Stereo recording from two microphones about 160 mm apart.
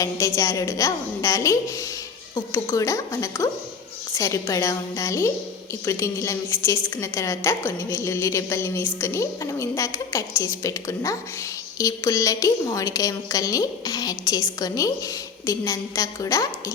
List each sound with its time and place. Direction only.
0.0 s a woman's voice: 20° left (ahead or behind)